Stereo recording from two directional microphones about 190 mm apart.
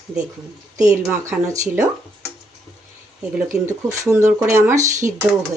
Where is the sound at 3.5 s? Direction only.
15° right (ahead or behind).